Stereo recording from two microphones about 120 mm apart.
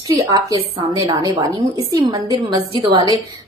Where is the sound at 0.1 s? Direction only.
30° right (ahead or behind).